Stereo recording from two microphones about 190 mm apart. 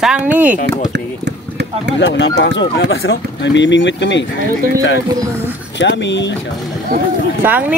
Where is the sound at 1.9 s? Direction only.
65° left (ahead or behind).